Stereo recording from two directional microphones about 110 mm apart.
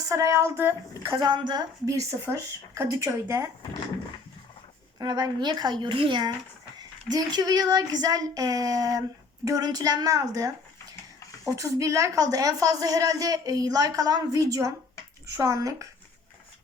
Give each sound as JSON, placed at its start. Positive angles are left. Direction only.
{"t": 0.1, "sound": "speech", "side_deg": -30}
{"t": 1.1, "sound": "speech", "side_deg": -40}
{"t": 2.0, "sound": "speech", "side_deg": -25}
{"t": 4.9, "sound": "speech", "side_deg": -35}
{"t": 5.8, "sound": "speech", "side_deg": -50}